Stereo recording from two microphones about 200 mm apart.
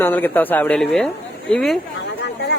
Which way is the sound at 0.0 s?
10° left (ahead or behind).